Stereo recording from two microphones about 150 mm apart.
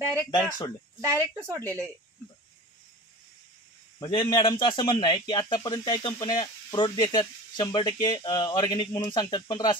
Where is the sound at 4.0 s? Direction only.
30° left (ahead or behind).